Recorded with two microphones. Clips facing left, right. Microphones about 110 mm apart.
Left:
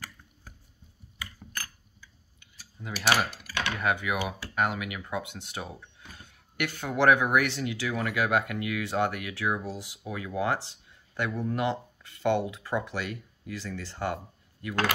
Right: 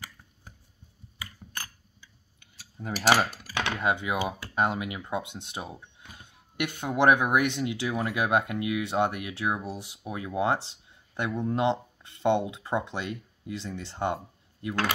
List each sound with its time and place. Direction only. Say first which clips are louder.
2.8 s speech: right 3 dB; 35° right (ahead or behind)
3.4 s speech: right 1 dB; 20° right (ahead or behind)